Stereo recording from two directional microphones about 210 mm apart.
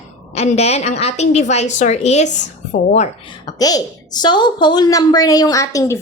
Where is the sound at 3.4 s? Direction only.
20° left (ahead or behind).